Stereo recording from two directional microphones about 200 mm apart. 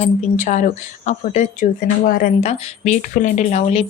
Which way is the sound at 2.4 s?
35° left (ahead or behind).